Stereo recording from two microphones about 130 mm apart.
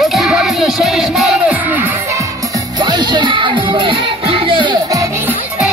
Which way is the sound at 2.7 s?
35° right (ahead or behind).